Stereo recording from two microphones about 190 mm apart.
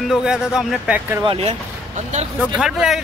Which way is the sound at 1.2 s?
30° right (ahead or behind).